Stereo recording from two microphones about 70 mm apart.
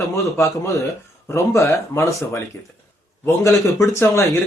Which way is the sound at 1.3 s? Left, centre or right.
Left.